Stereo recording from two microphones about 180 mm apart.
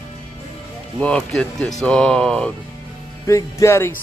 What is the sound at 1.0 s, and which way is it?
Speech, 5° left (ahead or behind).